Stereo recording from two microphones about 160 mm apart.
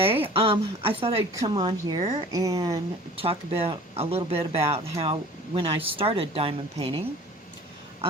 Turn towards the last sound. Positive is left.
turn(degrees=-35)  # may be behind; listen again after turning